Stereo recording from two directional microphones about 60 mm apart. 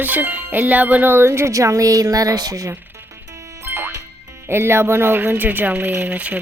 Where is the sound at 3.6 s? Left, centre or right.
Right.